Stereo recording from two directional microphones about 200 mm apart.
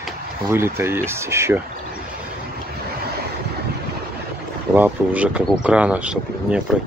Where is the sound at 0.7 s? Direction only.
10° right (ahead or behind).